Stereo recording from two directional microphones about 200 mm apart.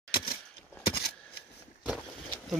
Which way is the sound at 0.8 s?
50° left (ahead or behind).